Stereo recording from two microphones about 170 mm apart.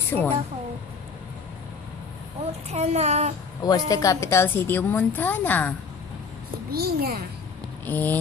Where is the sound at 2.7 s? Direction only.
40° right (ahead or behind).